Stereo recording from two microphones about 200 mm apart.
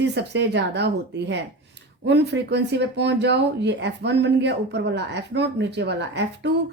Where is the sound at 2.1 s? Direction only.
60° right (ahead or behind).